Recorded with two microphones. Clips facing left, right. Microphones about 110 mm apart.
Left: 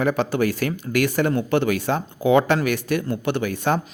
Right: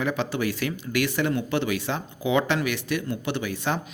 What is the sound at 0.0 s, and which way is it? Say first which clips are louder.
Speech: left 5 dB; 45° left (ahead or behind).